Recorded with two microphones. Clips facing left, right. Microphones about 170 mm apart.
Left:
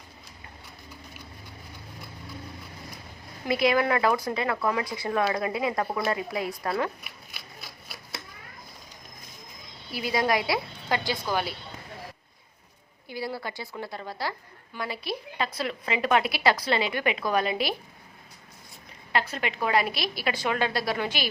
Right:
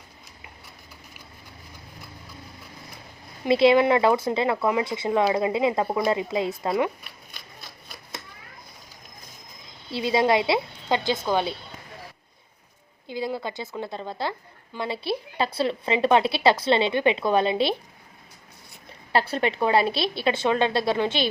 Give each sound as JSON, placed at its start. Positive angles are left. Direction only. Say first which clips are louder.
{"t": 3.4, "sound": "a woman's voice", "louder": "right 6 dB", "side_deg": -25}
{"t": 7.3, "sound": "a sound", "louder": "even", "side_deg": 5}
{"t": 9.9, "sound": "a woman's voice", "louder": "right 5 dB", "side_deg": -25}
{"t": 13.1, "sound": "a woman's voice", "louder": "right 4 dB", "side_deg": -20}
{"t": 19.1, "sound": "a woman's voice", "louder": "right 5 dB", "side_deg": -30}